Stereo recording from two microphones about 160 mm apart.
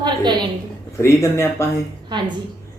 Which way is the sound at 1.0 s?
15° left (ahead or behind).